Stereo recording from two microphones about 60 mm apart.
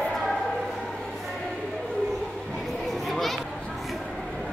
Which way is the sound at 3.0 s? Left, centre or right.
Centre.